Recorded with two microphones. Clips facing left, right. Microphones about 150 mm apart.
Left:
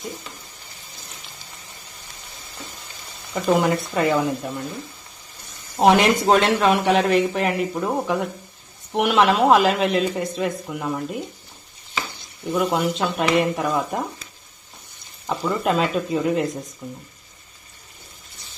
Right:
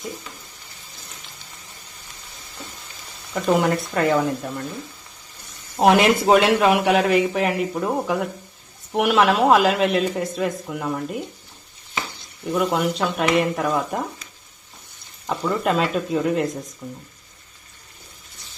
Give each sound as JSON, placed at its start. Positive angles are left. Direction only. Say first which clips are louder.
{"t": 3.3, "sound": "a man's voice", "louder": "even", "side_deg": 0}
{"t": 5.7, "sound": "a man's voice", "louder": "even", "side_deg": 0}
{"t": 12.5, "sound": "a man's voice", "louder": "even", "side_deg": 0}
{"t": 15.3, "sound": "a man's voice", "louder": "even", "side_deg": 0}